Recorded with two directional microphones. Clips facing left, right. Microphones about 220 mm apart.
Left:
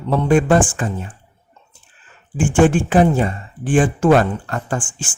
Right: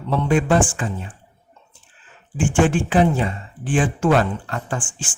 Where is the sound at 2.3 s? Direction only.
50° left (ahead or behind).